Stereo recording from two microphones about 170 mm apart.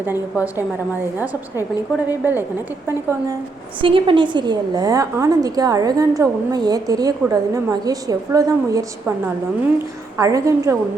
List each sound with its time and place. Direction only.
0.0 s a woman's voice: 10° right (ahead or behind)
3.8 s a woman's voice: 30° right (ahead or behind)